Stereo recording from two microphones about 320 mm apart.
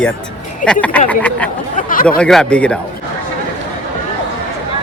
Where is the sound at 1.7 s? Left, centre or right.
Left.